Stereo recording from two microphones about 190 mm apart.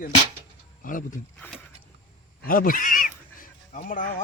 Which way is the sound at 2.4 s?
50° left (ahead or behind).